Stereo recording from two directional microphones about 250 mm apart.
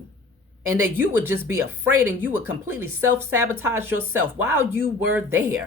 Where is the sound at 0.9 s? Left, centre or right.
Centre.